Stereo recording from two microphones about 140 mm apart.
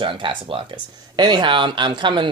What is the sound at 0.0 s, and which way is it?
Speech, 35° right (ahead or behind).